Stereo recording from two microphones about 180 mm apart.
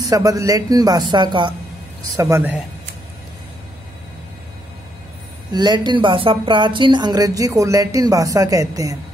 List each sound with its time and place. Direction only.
0.0 s speech: 20° right (ahead or behind)
5.5 s speech: 25° right (ahead or behind)